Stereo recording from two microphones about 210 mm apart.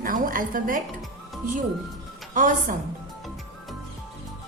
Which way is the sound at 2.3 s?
35° right (ahead or behind).